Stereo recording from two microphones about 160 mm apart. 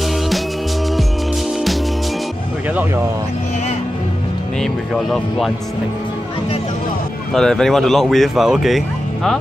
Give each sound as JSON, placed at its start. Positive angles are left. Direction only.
{"t": 4.6, "sound": "speech", "side_deg": 0}
{"t": 7.3, "sound": "speech", "side_deg": 5}